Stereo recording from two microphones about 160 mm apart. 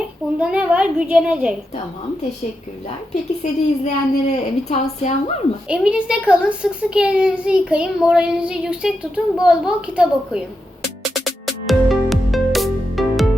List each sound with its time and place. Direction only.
0.3 s a child's voice: 10° right (ahead or behind)
3.4 s a woman's voice: 45° left (ahead or behind)
5.6 s a child's voice: 5° right (ahead or behind)
11.6 s music: centre (ahead or behind)